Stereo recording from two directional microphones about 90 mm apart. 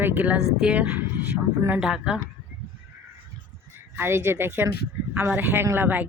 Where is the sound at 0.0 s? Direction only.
20° right (ahead or behind).